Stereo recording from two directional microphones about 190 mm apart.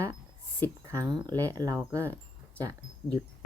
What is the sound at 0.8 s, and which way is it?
Speech, 20° right (ahead or behind).